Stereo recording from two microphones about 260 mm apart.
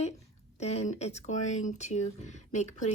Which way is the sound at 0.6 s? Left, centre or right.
Left.